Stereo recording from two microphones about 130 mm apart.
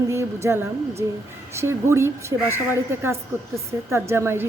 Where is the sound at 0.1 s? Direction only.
20° right (ahead or behind).